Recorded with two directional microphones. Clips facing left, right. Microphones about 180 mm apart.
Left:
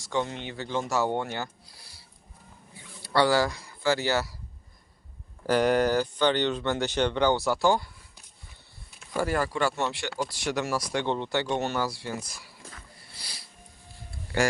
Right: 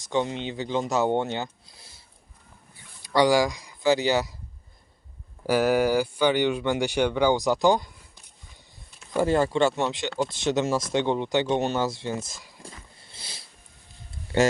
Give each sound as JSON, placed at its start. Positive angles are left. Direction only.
{"t": 0.0, "sound": "speech", "side_deg": -20}
{"t": 3.0, "sound": "speech", "side_deg": -15}
{"t": 5.5, "sound": "speech", "side_deg": -5}
{"t": 9.1, "sound": "speech", "side_deg": -25}
{"t": 13.0, "sound": "a sound", "side_deg": -25}
{"t": 14.3, "sound": "speech", "side_deg": -25}